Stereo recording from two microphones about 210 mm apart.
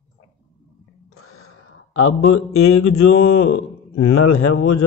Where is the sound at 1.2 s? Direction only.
90° left.